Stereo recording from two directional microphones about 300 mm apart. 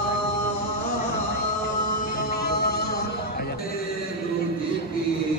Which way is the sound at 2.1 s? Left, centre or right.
Left.